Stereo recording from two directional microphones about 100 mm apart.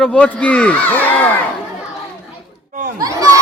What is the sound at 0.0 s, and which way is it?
Speech, 10° left (ahead or behind).